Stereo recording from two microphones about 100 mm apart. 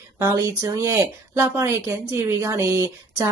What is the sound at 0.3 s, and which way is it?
Speech, 35° right (ahead or behind).